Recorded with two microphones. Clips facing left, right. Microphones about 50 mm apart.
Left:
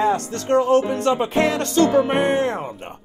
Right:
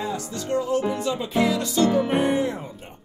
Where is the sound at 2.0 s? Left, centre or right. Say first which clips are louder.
Left 4 dB; centre.